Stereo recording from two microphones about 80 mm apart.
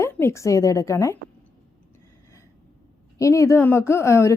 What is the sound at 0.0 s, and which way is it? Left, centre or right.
Speech, left.